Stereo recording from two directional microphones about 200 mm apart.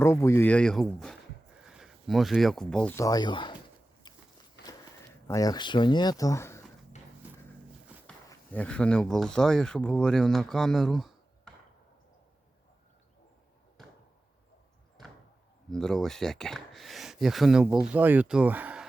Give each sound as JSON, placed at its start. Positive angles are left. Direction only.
{"t": 0.0, "sound": "speech", "side_deg": 15}
{"t": 4.1, "sound": "biting", "side_deg": 20}
{"t": 5.3, "sound": "speech", "side_deg": 20}
{"t": 8.3, "sound": "speech", "side_deg": 5}
{"t": 15.7, "sound": "speech", "side_deg": 0}